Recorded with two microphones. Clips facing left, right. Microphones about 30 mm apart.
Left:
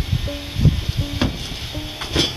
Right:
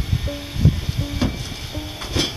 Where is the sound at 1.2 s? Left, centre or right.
Left.